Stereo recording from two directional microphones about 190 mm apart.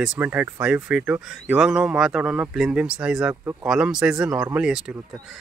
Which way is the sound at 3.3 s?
15° right (ahead or behind).